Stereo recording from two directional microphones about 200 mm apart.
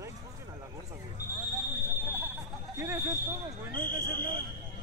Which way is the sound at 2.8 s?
15° right (ahead or behind).